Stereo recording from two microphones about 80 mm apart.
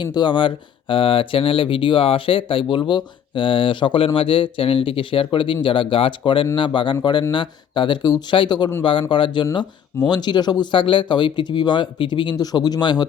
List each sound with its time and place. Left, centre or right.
0.0 s speech: left
8.3 s speech: left
8.8 s speech: left
10.1 s speech: left